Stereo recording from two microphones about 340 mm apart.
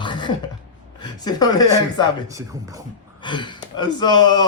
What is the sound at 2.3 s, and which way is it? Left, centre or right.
Speech, centre.